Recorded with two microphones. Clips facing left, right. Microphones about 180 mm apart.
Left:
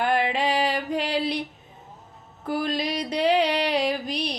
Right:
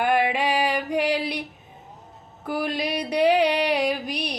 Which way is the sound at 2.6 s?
15° right (ahead or behind).